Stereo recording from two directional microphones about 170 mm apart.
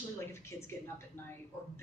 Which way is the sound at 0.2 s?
15° left (ahead or behind).